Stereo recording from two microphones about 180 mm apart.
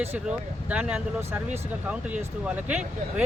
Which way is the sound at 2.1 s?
10° right (ahead or behind).